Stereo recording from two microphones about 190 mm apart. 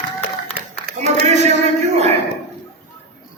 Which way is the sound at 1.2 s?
35° right (ahead or behind).